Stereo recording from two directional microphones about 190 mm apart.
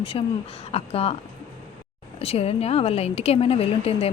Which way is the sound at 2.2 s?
30° left (ahead or behind).